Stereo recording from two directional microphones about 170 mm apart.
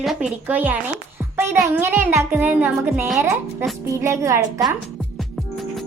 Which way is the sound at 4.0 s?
15° right (ahead or behind).